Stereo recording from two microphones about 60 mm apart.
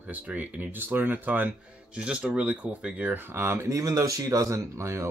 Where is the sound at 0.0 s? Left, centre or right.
Right.